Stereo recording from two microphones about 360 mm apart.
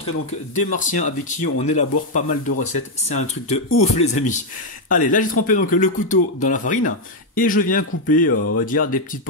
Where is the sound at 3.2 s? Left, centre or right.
Centre.